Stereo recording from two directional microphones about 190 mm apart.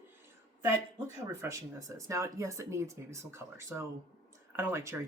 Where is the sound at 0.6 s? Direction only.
15° right (ahead or behind).